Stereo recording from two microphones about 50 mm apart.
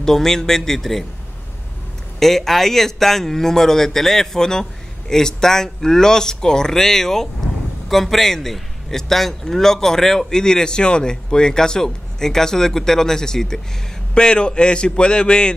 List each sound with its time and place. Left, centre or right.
0.0 s a man's voice: centre
2.1 s a man's voice: centre